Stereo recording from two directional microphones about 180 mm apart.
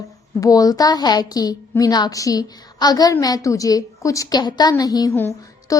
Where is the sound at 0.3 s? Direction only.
20° left (ahead or behind).